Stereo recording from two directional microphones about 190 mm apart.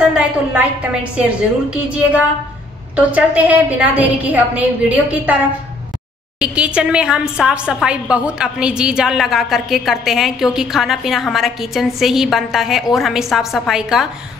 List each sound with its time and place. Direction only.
0.1 s a woman's voice: 5° right (ahead or behind)
6.4 s a woman's voice: 5° right (ahead or behind)